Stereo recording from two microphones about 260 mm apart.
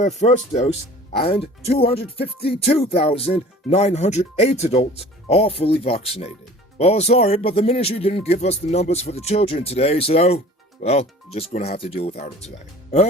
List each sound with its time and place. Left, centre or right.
0.0 s speech: left